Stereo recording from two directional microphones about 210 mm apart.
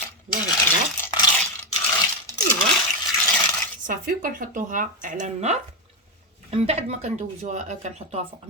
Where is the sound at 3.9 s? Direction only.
40° right (ahead or behind).